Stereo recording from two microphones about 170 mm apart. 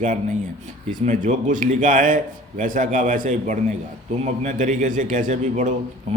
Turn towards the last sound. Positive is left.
turn(degrees=-45)  # may be behind; listen again after turning